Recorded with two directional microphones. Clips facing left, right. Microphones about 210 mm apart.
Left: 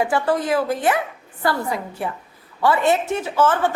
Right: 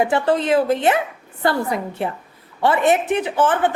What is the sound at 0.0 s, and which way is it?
A woman's voice, 25° right (ahead or behind).